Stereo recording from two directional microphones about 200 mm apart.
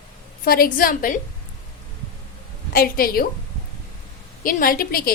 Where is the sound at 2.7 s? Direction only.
50° left (ahead or behind).